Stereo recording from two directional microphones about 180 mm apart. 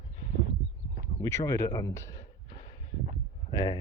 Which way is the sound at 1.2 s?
15° left (ahead or behind).